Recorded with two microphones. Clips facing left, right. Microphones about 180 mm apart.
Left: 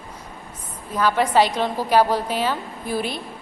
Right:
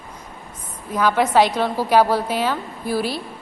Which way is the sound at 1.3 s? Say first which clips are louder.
Right 2 dB; 10° right (ahead or behind).